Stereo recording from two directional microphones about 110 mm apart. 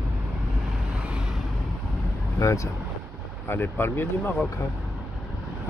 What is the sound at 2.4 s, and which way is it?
Speech, 30° left (ahead or behind).